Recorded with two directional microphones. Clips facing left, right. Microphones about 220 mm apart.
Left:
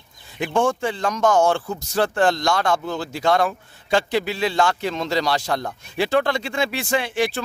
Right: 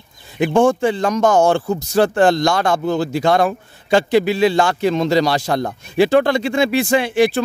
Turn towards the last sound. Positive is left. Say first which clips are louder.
# right 7 dB
turn(degrees=-10)  # may be behind; listen again after turning